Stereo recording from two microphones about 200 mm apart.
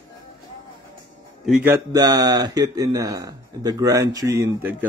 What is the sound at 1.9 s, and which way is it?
Speech, 20° right (ahead or behind).